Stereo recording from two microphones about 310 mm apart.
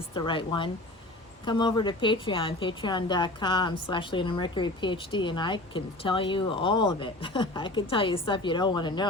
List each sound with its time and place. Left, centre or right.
0.1 s a woman's voice: centre